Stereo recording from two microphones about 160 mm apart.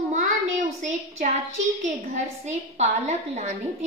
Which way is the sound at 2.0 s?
45° right (ahead or behind).